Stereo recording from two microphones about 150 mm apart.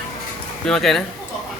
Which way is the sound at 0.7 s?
5° left (ahead or behind).